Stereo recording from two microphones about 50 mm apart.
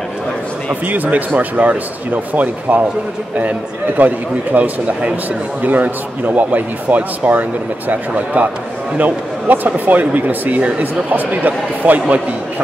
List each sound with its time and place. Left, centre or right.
0.8 s speech: right